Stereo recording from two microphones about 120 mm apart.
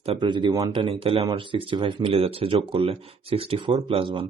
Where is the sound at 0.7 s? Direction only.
45° right (ahead or behind).